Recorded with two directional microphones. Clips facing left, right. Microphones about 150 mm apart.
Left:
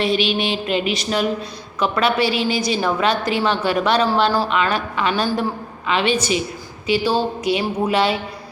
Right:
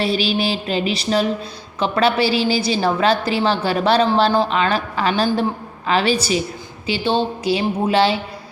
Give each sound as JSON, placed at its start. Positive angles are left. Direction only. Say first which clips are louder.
{"t": 0.0, "sound": "a woman's voice", "louder": "even", "side_deg": -35}